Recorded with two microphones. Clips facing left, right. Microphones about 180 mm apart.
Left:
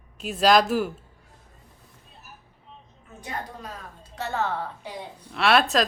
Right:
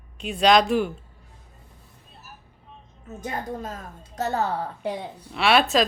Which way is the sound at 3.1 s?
45° right (ahead or behind).